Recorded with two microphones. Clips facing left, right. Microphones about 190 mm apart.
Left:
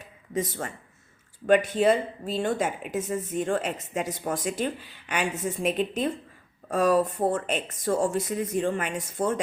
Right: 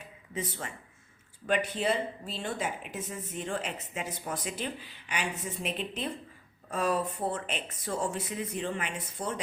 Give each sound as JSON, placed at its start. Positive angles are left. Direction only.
{"t": 0.3, "sound": "speech", "side_deg": 45}